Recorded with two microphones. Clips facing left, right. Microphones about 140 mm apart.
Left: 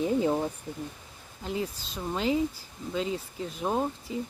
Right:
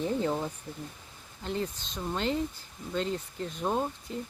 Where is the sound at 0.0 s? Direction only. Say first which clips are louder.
Left 4 dB; 10° left (ahead or behind).